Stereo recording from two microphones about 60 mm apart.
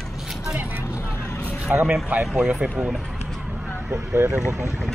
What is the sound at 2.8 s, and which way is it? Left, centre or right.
Run, centre.